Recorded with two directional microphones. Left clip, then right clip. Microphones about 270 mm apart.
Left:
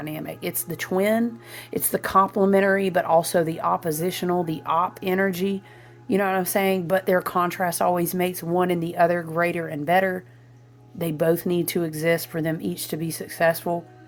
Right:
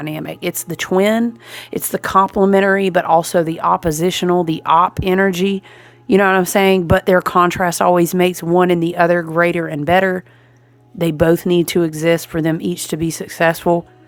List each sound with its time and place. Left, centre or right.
0.0 s speech: right